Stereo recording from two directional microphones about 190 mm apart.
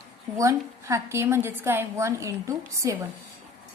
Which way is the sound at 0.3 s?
15° right (ahead or behind).